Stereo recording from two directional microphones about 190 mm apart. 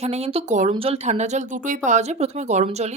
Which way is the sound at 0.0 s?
35° right (ahead or behind).